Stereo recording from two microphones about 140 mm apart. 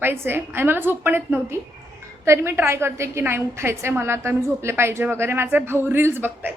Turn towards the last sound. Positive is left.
turn(degrees=-15)  # may be behind; listen again after turning